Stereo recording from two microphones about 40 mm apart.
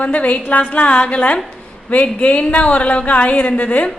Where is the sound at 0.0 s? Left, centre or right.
Left.